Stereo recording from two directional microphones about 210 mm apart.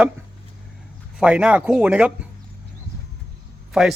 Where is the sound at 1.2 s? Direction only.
5° right (ahead or behind).